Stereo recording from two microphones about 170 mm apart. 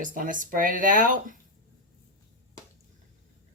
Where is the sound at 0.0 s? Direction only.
50° right (ahead or behind).